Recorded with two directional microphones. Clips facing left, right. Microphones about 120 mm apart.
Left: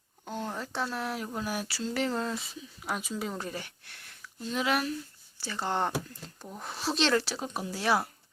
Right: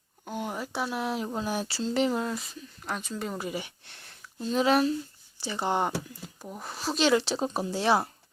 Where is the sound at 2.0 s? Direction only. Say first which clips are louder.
Right 3 dB; 5° right (ahead or behind); by 4.9 s 30° right (ahead or behind).